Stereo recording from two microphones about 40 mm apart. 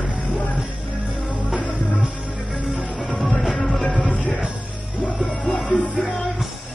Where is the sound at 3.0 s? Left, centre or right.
Centre.